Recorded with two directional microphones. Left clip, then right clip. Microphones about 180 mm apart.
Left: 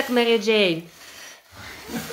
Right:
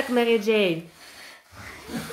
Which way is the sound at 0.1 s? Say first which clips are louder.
Left 2 dB; centre (ahead or behind).